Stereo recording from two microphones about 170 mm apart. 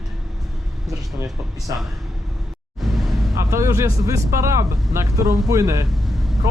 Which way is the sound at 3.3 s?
15° right (ahead or behind).